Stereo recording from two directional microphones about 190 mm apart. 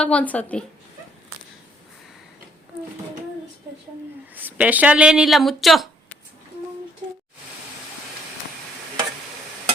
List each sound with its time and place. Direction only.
0.0 s a woman's voice: 5° left (ahead or behind)
4.4 s speech: 10° right (ahead or behind)